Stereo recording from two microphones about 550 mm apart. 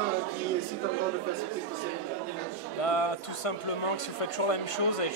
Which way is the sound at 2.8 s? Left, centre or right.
Left.